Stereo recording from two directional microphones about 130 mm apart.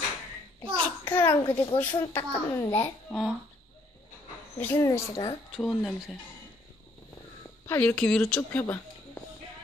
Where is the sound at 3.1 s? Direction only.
Centre (ahead or behind).